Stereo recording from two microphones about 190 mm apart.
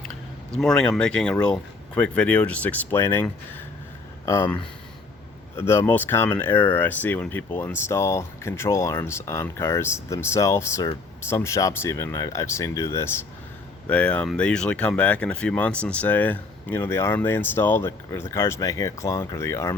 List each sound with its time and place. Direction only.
0.5 s speech: 5° left (ahead or behind)